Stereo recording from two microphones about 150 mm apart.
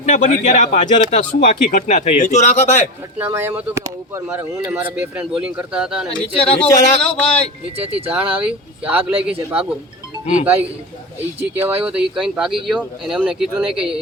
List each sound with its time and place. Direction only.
0.0 s speech: 55° left (ahead or behind)
3.2 s speech: 15° right (ahead or behind)
6.3 s speech: 40° left (ahead or behind)
6.6 s speech: 5° left (ahead or behind)
7.6 s speech: 40° right (ahead or behind)
8.1 s speech: 10° right (ahead or behind)